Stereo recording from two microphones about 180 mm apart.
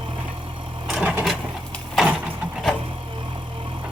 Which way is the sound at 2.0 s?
5° right (ahead or behind).